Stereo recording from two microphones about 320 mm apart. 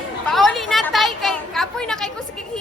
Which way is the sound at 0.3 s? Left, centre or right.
Centre.